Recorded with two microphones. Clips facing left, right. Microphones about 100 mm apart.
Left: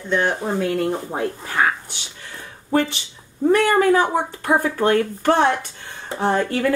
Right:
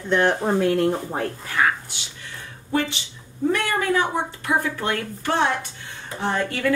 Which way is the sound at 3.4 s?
40° left (ahead or behind).